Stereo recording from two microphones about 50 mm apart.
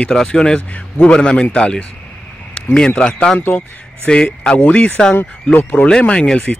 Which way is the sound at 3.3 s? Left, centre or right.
Left.